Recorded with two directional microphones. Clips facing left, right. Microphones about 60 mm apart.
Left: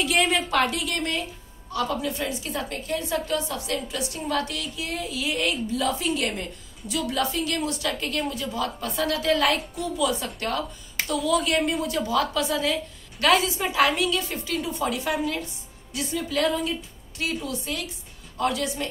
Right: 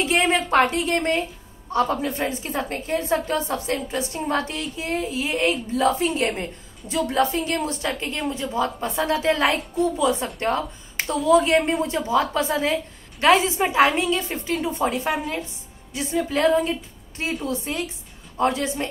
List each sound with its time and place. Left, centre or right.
0.0 s a woman's voice: right